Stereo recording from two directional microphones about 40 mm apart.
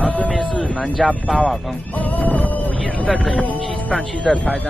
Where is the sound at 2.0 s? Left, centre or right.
Left.